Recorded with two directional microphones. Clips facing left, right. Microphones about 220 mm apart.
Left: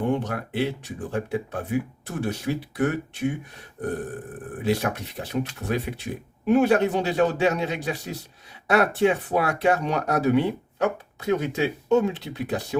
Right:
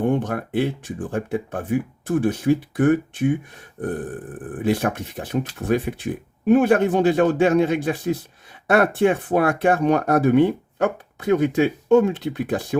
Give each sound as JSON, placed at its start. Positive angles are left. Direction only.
{"t": 0.0, "sound": "speech", "side_deg": -50}
{"t": 4.6, "sound": "speech", "side_deg": -50}